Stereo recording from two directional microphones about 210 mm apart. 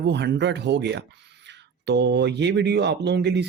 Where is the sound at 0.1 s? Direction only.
55° right (ahead or behind).